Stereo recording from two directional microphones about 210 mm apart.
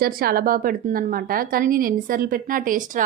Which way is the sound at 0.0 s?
45° right (ahead or behind).